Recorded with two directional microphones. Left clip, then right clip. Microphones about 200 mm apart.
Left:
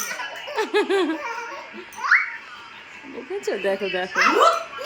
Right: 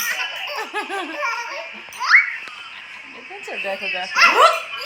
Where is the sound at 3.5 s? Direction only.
15° left (ahead or behind).